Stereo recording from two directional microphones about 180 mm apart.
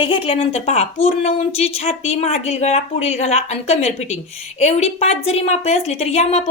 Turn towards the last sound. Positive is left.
turn(degrees=35)  # may be behind; listen again after turning